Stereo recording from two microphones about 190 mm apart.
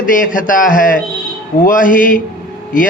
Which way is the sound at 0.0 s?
45° left (ahead or behind).